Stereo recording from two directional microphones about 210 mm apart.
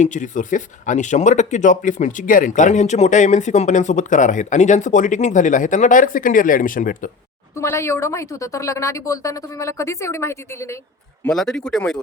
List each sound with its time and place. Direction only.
0.0 s speech: 35° left (ahead or behind)
7.5 s a woman's voice: 15° left (ahead or behind)